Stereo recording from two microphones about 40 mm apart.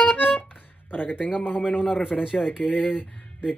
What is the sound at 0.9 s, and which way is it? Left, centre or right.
Speech, left.